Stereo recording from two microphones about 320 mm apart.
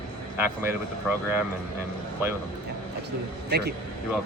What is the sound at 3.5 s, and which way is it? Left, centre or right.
Speech, right.